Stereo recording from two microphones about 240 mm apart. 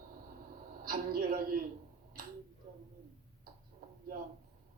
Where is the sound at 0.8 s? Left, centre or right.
Right.